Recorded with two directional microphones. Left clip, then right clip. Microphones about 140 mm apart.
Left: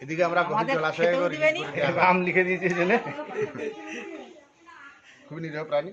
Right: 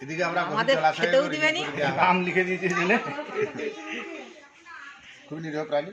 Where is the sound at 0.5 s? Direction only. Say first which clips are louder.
Right 3 dB; 10° left (ahead or behind).